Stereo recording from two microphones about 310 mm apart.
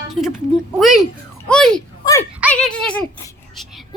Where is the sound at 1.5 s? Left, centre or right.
Centre.